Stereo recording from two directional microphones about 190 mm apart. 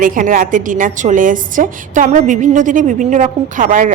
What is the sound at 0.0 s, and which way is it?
A woman's voice, 45° right (ahead or behind).